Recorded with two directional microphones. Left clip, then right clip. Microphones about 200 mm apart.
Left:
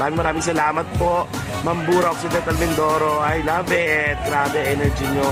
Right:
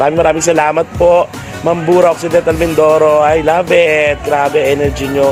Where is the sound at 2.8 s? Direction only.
20° right (ahead or behind).